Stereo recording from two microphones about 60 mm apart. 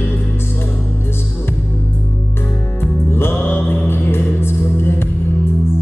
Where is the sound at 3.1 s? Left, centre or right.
Left.